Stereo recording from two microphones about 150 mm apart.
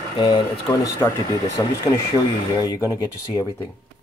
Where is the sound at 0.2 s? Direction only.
30° left (ahead or behind).